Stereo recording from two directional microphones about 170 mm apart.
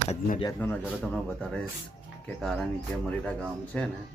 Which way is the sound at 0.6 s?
10° left (ahead or behind).